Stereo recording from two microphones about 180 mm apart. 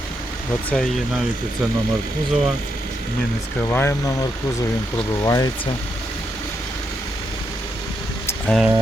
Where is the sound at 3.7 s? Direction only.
15° left (ahead or behind).